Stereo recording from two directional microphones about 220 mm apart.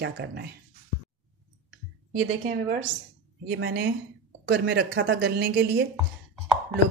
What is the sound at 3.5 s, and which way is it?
Speech, 50° right (ahead or behind).